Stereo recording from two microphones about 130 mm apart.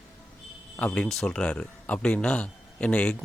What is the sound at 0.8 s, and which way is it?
Speech, 10° left (ahead or behind).